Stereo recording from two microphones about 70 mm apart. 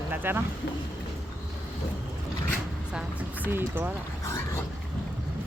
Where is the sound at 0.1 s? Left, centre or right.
Right.